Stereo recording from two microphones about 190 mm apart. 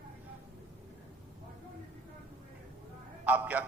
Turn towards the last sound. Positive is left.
turn(degrees=-10)  # may be behind; listen again after turning